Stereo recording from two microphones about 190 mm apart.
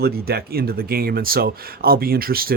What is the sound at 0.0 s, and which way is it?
Speech, 55° right (ahead or behind).